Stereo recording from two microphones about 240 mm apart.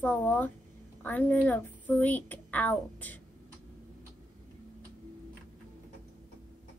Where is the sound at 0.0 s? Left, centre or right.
Centre.